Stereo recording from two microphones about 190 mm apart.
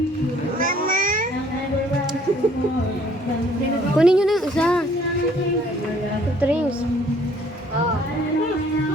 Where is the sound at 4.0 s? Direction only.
5° right (ahead or behind).